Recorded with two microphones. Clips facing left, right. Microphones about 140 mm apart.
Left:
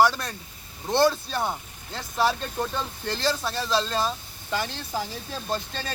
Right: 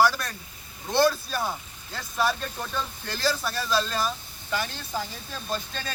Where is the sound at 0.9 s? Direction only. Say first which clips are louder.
Left 1 dB; 25° left (ahead or behind).